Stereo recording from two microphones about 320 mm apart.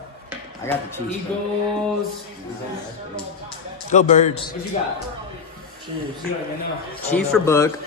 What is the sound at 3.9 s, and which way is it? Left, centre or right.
Speech, left.